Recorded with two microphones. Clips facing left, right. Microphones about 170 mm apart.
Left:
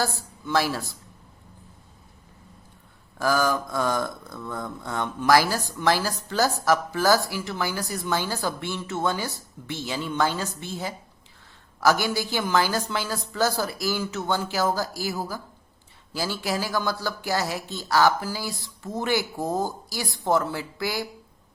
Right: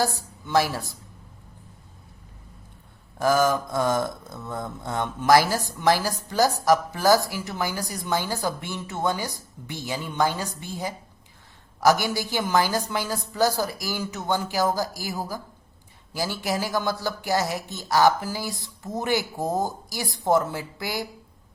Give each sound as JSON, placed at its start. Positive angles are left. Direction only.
{"t": 0.0, "sound": "speech", "side_deg": -20}
{"t": 3.2, "sound": "a woman's voice", "side_deg": -20}